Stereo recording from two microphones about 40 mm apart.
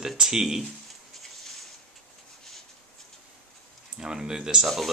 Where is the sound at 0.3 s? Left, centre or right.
Centre.